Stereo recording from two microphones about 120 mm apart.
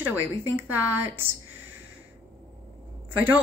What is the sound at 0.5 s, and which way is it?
Speech, 20° right (ahead or behind).